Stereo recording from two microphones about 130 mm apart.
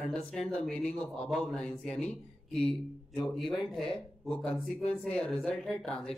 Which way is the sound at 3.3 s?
Centre (ahead or behind).